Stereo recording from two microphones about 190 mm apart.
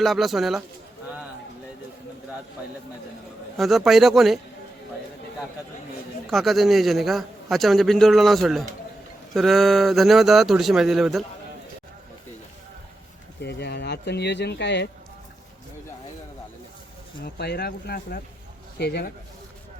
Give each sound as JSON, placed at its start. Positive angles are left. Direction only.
{"t": 0.0, "sound": "a man's voice", "side_deg": 0}
{"t": 3.6, "sound": "a man's voice", "side_deg": 0}
{"t": 6.3, "sound": "a man's voice", "side_deg": 0}
{"t": 13.4, "sound": "speech", "side_deg": 60}
{"t": 17.2, "sound": "speech", "side_deg": 60}